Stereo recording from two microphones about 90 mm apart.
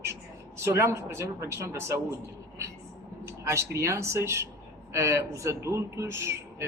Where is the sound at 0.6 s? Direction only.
30° right (ahead or behind).